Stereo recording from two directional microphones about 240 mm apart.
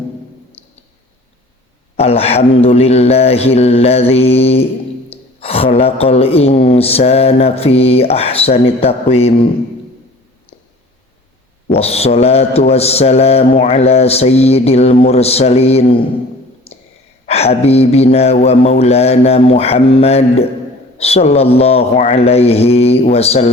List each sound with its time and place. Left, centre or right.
2.0 s a woman's voice: left
11.8 s a woman's voice: left
17.2 s a woman's voice: left